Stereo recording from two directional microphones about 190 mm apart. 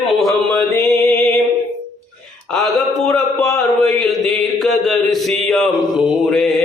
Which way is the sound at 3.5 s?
Centre (ahead or behind).